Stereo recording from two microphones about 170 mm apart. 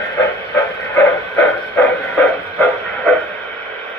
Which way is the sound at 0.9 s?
15° left (ahead or behind).